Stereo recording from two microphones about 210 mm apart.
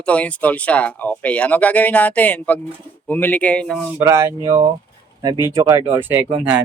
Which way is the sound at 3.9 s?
15° right (ahead or behind).